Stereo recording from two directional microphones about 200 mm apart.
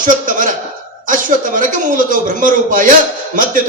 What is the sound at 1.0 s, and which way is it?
A man's voice, 40° right (ahead or behind).